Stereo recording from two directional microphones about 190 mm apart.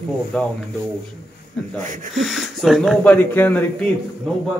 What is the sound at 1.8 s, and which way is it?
Speech, 40° right (ahead or behind).